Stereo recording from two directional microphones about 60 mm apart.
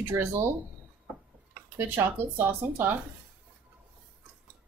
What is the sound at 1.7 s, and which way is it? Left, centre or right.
Speech, right.